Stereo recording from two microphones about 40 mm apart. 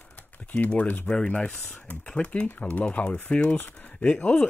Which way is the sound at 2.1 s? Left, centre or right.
Left.